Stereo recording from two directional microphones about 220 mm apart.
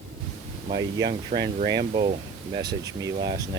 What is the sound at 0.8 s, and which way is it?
Speech, 15° right (ahead or behind).